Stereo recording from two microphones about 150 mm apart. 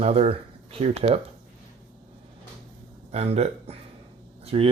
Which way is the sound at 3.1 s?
45° right (ahead or behind).